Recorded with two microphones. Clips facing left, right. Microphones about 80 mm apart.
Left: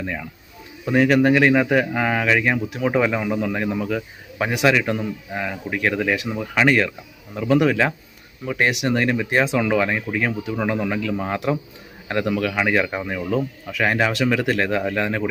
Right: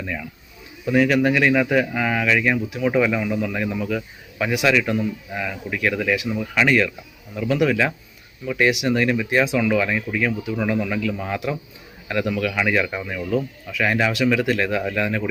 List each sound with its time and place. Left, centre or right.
0.0 s speech: left